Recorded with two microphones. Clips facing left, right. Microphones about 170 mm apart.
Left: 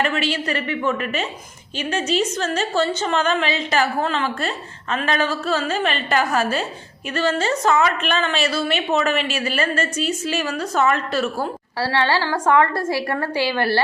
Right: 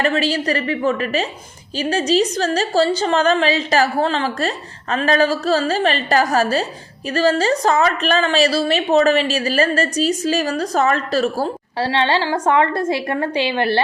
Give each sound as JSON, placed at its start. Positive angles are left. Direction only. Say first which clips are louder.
{"t": 0.0, "sound": "a woman's voice", "louder": "right 4 dB", "side_deg": -40}
{"t": 11.8, "sound": "a woman's voice", "louder": "right 2 dB", "side_deg": -20}